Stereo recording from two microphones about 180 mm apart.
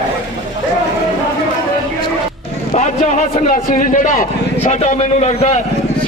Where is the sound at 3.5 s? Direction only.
45° left (ahead or behind).